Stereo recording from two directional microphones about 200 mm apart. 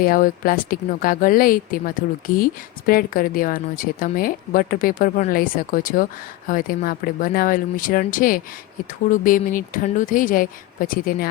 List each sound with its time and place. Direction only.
0.0 s a woman's voice: 45° left (ahead or behind)